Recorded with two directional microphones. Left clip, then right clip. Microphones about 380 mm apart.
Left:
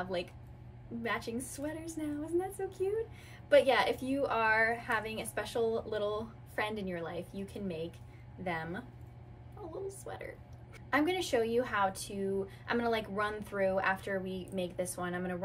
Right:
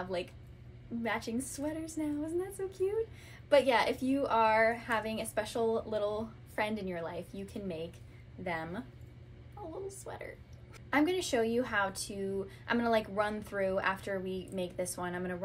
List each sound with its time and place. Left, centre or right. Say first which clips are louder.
0.0 s a woman's voice: even; centre
3.4 s a woman's voice: left 1 dB; centre
9.8 s a woman's voice: left 1 dB; centre